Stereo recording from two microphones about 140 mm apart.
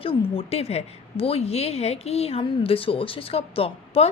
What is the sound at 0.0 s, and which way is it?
A woman's voice, 40° left (ahead or behind).